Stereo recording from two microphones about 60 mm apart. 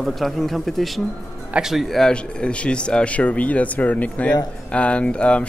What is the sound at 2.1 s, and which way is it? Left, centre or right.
Speech, centre.